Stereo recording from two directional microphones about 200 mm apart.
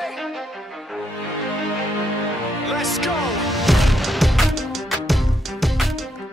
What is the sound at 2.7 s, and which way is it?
Music, centre (ahead or behind).